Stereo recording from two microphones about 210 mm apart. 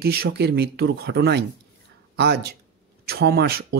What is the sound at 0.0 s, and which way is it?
A man's voice, 50° right (ahead or behind).